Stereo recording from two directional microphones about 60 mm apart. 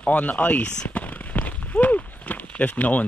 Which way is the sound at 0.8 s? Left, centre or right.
Left.